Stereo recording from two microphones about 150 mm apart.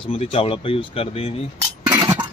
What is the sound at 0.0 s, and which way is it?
Speech, 35° left (ahead or behind).